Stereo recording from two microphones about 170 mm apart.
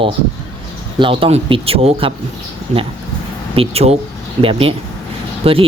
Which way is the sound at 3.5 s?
35° right (ahead or behind).